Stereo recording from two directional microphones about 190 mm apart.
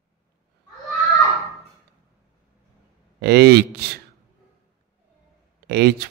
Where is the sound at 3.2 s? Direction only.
60° right (ahead or behind).